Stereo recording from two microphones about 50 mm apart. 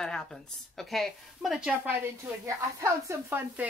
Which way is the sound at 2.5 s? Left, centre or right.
Right.